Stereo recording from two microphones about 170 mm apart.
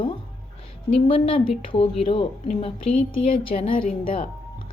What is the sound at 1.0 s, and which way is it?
Speech, 35° left (ahead or behind).